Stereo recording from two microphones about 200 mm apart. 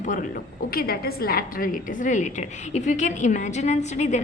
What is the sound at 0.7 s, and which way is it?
A woman's voice, 50° left (ahead or behind).